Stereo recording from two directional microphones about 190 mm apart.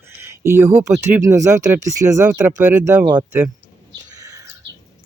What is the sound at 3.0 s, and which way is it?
Speech, 20° right (ahead or behind).